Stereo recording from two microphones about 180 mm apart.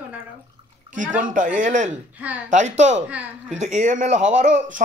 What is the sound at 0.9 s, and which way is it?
Speech, 45° right (ahead or behind).